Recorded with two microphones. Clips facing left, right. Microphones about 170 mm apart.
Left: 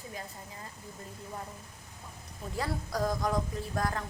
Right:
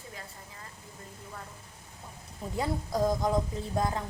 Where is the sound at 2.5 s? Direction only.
20° right (ahead or behind).